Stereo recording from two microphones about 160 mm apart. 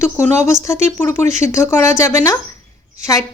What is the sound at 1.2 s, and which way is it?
Speech, 45° right (ahead or behind).